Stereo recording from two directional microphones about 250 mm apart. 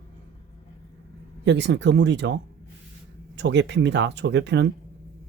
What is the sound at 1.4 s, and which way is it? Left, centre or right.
Speech, right.